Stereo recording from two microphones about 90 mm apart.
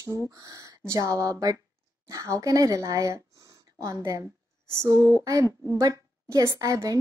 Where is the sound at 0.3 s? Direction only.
40° right (ahead or behind).